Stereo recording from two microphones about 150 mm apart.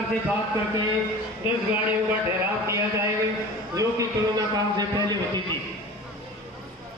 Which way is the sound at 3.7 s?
20° right (ahead or behind).